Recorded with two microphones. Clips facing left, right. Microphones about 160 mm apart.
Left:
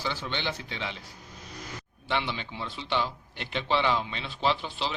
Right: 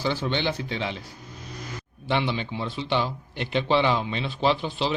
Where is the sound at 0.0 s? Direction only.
40° right (ahead or behind).